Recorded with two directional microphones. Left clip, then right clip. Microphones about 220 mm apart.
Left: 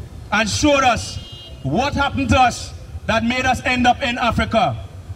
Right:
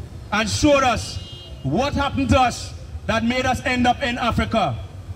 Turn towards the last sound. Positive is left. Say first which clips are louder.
# left 3 dB
turn(degrees=30)  # may be behind; listen again after turning